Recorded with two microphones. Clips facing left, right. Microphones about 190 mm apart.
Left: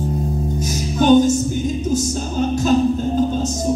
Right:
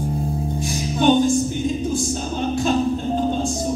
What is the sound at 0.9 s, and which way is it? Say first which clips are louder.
Music: left 4 dB; 40° left (ahead or behind).